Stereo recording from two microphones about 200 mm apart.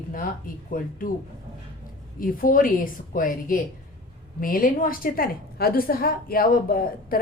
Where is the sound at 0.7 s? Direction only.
45° left (ahead or behind).